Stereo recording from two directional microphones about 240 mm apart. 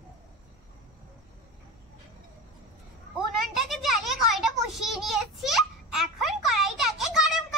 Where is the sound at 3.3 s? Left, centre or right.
Centre.